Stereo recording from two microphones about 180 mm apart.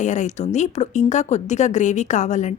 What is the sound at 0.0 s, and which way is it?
A woman's voice, 40° left (ahead or behind).